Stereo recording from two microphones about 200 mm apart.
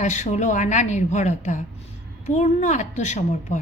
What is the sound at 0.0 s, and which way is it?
A woman's voice, 35° left (ahead or behind).